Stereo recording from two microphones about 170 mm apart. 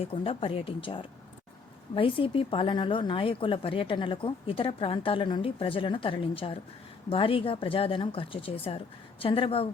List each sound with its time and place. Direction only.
0.1 s speech: 35° left (ahead or behind)